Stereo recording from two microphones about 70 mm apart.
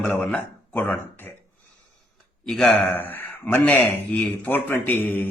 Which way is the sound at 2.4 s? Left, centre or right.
Centre.